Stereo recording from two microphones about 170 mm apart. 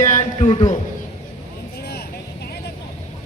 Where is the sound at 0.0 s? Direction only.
45° left (ahead or behind).